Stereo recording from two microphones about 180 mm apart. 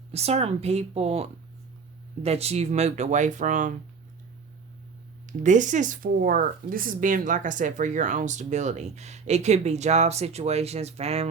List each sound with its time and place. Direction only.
0.1 s speech: 35° right (ahead or behind)
5.2 s speech: 45° right (ahead or behind)